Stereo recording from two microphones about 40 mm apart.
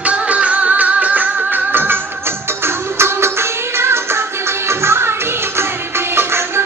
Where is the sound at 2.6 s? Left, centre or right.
Right.